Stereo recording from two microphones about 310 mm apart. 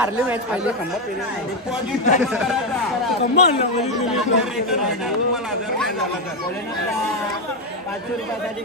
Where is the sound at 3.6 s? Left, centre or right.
Left.